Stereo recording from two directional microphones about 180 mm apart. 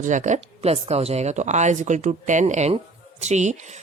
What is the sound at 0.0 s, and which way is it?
Speech, 40° right (ahead or behind).